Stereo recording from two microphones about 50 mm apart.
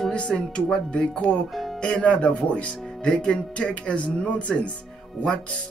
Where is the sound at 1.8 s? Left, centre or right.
Left.